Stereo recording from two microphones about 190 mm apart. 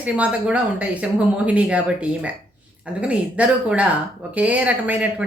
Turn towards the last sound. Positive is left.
turn(degrees=-5)  # may be behind; listen again after turning